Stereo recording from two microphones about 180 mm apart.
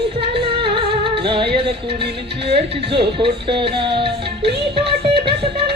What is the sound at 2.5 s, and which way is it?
Speech, 30° right (ahead or behind).